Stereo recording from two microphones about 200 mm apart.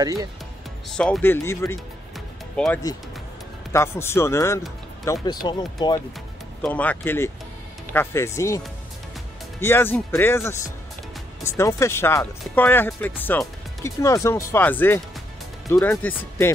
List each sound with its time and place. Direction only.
0.0 s speech: 20° right (ahead or behind)
0.8 s speech: centre (ahead or behind)
2.1 s music: 5° left (ahead or behind)
3.7 s speech: 10° left (ahead or behind)
6.6 s speech: 10° left (ahead or behind)